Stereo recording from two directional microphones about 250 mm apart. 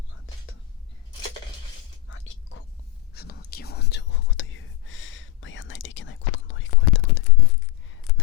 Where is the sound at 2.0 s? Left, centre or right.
Left.